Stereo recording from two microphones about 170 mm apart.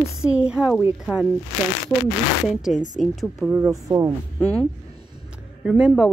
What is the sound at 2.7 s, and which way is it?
Speech, 50° left (ahead or behind).